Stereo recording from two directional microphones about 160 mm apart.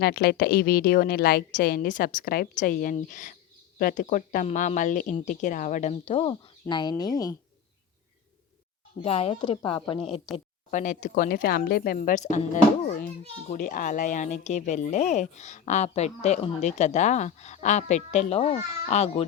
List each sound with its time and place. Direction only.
0.0 s a woman's voice: 80° left; by 7.3 s 25° left (ahead or behind)
9.0 s speech: 40° left (ahead or behind)
10.3 s speech: centre (ahead or behind)
10.7 s speech: 50° left (ahead or behind)
13.5 s speech: 55° left (ahead or behind); by 19.2 s 40° left (ahead or behind)